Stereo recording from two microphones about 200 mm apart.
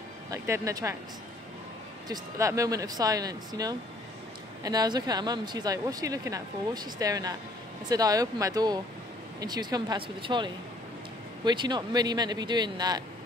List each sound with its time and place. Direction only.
0.3 s speech: 15° right (ahead or behind)
2.0 s speech: 15° right (ahead or behind)